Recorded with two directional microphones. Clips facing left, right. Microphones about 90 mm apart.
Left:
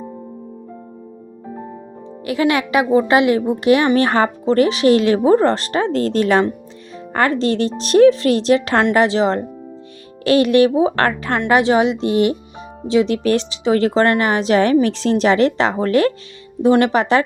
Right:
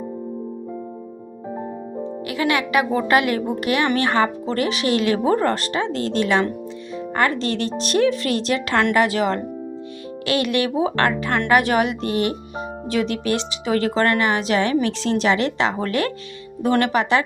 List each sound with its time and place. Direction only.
2.2 s speech: 30° left (ahead or behind)
11.3 s speech: 25° left (ahead or behind)
13.2 s speech: 35° left (ahead or behind)